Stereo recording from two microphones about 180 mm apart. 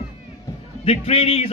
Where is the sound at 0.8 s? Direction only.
35° left (ahead or behind).